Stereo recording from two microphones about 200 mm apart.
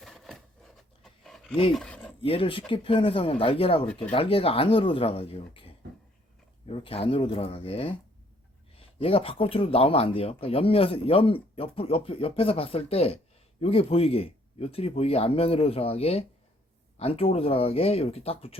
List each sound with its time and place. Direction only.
0.0 s a sound: centre (ahead or behind)
1.7 s speech: 5° left (ahead or behind)
2.2 s speech: 30° left (ahead or behind)